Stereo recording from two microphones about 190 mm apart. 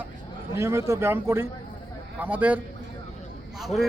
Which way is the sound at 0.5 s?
15° right (ahead or behind).